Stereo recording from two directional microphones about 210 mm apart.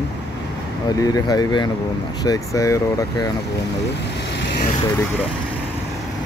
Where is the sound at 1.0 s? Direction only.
15° left (ahead or behind).